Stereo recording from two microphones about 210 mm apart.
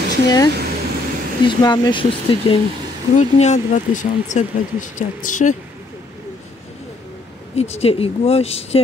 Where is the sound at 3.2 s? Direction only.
35° left (ahead or behind).